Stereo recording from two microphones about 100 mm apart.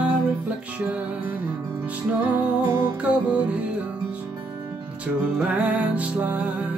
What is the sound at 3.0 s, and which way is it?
Music, 15° right (ahead or behind).